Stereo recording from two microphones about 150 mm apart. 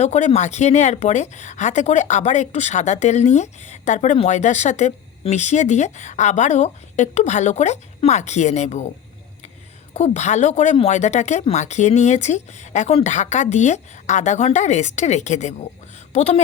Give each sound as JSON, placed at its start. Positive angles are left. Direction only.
{"t": 0.0, "sound": "a woman's voice", "side_deg": 50}
{"t": 9.9, "sound": "a woman's voice", "side_deg": 50}